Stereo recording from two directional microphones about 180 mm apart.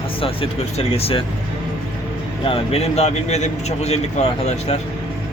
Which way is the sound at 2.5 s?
35° left (ahead or behind).